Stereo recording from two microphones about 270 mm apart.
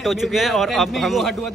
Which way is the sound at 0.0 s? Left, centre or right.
Centre.